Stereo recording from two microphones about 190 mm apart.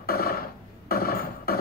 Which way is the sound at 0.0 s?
50° left (ahead or behind).